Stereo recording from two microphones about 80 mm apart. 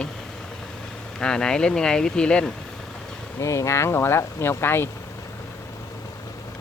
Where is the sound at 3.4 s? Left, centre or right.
Left.